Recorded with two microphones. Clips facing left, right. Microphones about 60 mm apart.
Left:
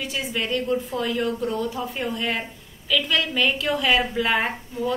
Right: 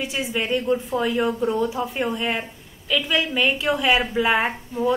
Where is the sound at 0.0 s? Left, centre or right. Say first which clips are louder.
Right 2 dB; centre.